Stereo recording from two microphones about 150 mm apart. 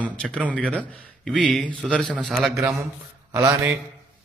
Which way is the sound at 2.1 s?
5° right (ahead or behind).